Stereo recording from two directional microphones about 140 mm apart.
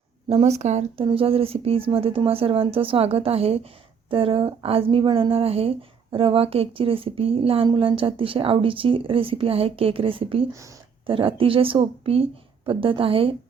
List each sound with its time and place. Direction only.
0.3 s speech: 50° right (ahead or behind)
0.9 s a woman's voice: 40° right (ahead or behind)